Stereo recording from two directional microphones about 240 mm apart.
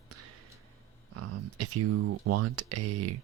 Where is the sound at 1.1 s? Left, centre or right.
Right.